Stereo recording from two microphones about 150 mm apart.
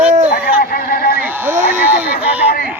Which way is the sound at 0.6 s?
85° left.